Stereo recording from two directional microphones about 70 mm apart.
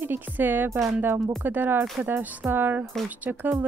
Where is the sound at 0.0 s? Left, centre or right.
Right.